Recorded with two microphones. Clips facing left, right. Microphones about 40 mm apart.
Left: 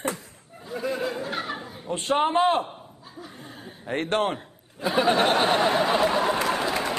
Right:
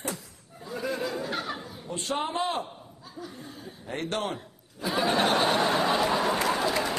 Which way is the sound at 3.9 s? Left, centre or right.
Left.